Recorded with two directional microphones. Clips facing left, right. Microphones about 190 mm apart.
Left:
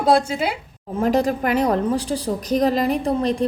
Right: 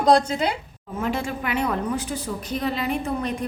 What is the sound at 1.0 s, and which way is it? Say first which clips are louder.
A woman's voice: left 8 dB; 40° left (ahead or behind).